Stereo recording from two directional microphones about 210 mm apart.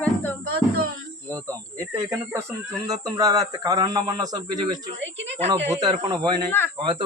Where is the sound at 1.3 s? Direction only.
15° right (ahead or behind).